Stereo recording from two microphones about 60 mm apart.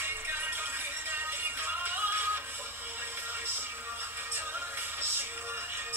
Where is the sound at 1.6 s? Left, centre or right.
Right.